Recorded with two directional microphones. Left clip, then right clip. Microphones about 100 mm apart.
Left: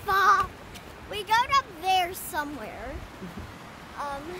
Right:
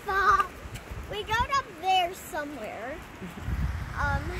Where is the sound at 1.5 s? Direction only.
40° left (ahead or behind).